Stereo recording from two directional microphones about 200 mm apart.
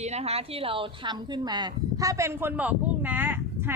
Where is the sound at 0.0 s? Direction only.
35° right (ahead or behind).